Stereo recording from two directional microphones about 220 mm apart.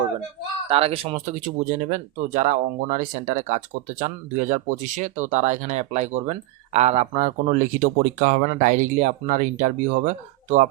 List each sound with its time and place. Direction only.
0.7 s speech: 25° right (ahead or behind)